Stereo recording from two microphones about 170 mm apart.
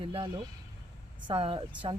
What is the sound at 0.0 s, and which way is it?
Speech, 30° right (ahead or behind).